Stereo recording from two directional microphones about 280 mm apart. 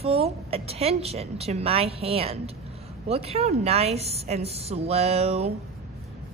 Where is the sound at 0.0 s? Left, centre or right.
Right.